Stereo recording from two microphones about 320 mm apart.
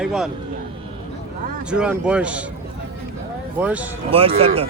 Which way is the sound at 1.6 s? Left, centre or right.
Centre.